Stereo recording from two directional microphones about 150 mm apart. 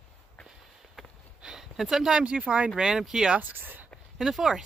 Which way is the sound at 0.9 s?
Centre (ahead or behind).